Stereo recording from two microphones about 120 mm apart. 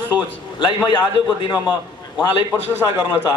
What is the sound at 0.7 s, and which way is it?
Speech, 35° left (ahead or behind).